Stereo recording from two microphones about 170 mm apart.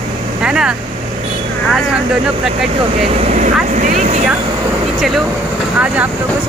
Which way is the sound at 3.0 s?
35° right (ahead or behind).